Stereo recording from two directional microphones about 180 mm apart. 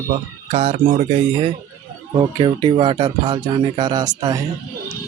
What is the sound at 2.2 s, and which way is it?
Speech, 25° right (ahead or behind).